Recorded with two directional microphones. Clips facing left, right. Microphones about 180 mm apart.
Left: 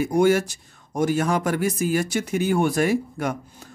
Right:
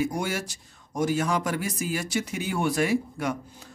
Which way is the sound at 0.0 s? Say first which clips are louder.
Left 9 dB; 50° left (ahead or behind).